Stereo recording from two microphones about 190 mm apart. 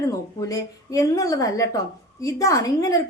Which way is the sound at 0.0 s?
15° left (ahead or behind).